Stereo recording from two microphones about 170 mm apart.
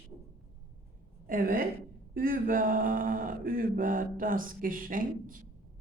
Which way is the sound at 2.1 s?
55° right (ahead or behind).